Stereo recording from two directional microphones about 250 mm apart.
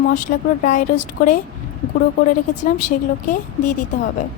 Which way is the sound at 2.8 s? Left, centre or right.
Left.